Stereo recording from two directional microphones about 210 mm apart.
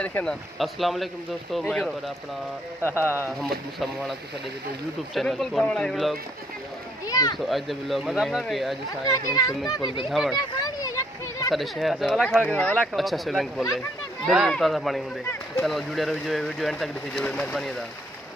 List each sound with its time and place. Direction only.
0.0 s speech: 5° left (ahead or behind)
3.0 s a child's voice: 10° left (ahead or behind)
5.1 s speech: centre (ahead or behind)
7.1 s a child's voice: 15° left (ahead or behind)
7.3 s speech: centre (ahead or behind)
9.0 s a child's voice: 15° left (ahead or behind)
10.0 s speech: centre (ahead or behind)
10.3 s a sound: 15° left (ahead or behind)
11.5 s speech: centre (ahead or behind)